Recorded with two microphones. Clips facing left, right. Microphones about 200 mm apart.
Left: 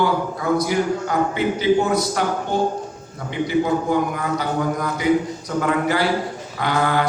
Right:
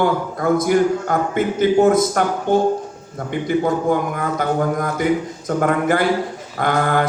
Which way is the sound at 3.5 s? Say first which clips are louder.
Right 2 dB; 50° right (ahead or behind).